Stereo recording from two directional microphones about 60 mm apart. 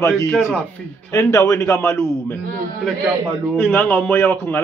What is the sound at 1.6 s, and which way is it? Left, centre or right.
Speech, left.